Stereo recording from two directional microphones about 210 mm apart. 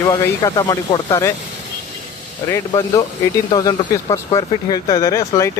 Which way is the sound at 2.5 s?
15° left (ahead or behind).